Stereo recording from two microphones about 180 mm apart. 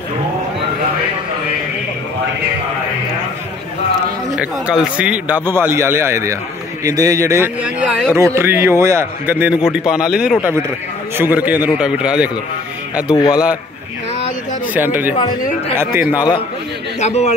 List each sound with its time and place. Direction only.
4.9 s a man's voice: 5° right (ahead or behind)
13.3 s a man's voice: 5° right (ahead or behind)
14.7 s a man's voice: 10° right (ahead or behind)
17.0 s a man's voice: 35° left (ahead or behind)